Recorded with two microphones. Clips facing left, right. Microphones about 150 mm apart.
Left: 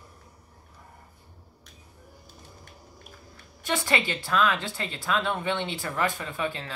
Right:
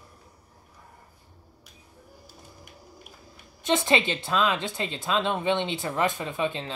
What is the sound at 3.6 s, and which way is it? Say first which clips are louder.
Speech: right 4 dB; 20° right (ahead or behind).